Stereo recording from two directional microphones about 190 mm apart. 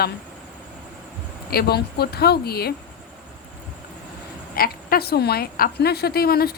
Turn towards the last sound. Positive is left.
turn(degrees=55)  # may be behind; listen again after turning